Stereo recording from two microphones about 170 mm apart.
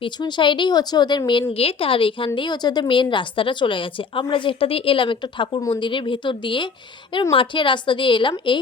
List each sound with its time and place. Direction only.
0.0 s a woman's voice: 25° left (ahead or behind)